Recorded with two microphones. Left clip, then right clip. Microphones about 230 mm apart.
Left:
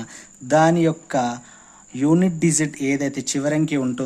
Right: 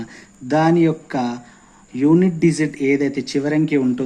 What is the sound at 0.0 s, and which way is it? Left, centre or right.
Speech, left.